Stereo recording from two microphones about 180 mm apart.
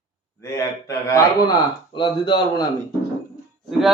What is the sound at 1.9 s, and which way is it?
Speech, 25° left (ahead or behind).